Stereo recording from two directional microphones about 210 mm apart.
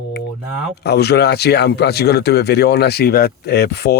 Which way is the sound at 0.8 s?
50° left (ahead or behind).